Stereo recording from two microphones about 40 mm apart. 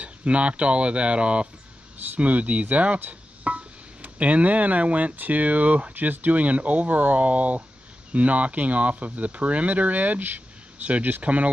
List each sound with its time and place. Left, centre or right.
0.0 s speech: right
3.1 s a sound: right
5.1 s speech: right
5.9 s speech: right